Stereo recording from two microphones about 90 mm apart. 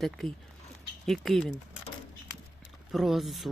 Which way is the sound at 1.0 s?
5° left (ahead or behind).